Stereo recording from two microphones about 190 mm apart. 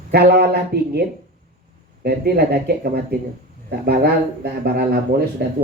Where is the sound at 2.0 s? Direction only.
55° right (ahead or behind).